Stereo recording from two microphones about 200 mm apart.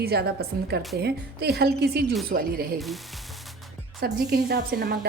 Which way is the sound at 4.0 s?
50° right (ahead or behind).